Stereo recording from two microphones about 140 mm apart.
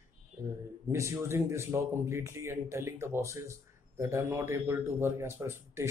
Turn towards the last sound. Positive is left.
turn(degrees=-20)  # may be behind; listen again after turning